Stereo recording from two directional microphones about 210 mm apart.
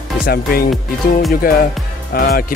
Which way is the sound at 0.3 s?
45° left (ahead or behind).